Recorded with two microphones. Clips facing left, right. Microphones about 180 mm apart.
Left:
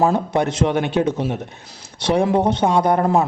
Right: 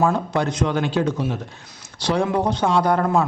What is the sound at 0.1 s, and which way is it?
A man's voice, 25° left (ahead or behind).